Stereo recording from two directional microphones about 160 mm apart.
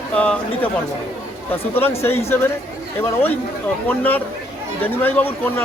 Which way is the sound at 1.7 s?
15° left (ahead or behind).